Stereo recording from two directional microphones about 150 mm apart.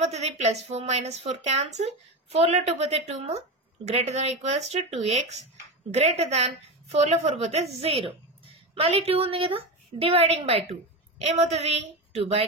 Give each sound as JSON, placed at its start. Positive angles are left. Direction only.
{"t": 0.0, "sound": "a woman's voice", "side_deg": -45}